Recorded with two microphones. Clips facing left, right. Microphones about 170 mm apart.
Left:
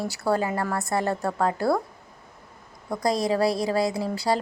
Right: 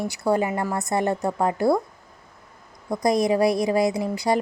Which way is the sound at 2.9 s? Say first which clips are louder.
Right 3 dB; 20° right (ahead or behind).